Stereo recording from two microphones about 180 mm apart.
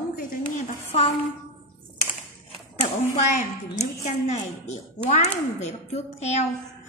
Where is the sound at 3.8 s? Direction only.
40° left (ahead or behind).